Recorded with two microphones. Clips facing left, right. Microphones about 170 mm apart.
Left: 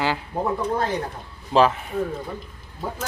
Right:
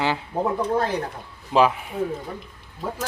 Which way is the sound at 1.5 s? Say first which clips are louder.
Left 1 dB; 10° right (ahead or behind).